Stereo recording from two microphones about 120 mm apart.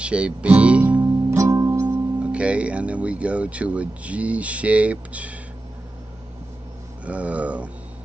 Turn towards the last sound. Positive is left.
turn(degrees=-10)  # may be behind; listen again after turning